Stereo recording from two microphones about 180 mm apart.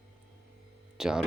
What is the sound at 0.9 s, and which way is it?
Speech, 5° right (ahead or behind).